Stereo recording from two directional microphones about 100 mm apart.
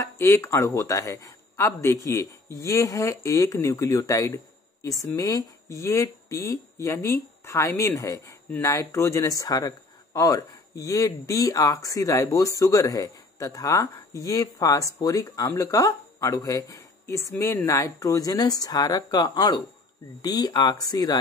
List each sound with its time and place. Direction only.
0.0 s speech: 30° left (ahead or behind)